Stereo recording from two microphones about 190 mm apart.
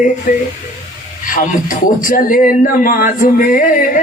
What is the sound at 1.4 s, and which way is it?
A man's voice, 45° left (ahead or behind).